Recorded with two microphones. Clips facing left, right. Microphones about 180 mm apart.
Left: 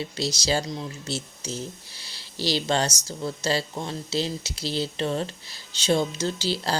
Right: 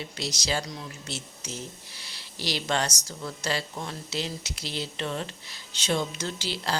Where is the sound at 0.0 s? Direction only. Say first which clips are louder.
Left 5 dB; 30° left (ahead or behind).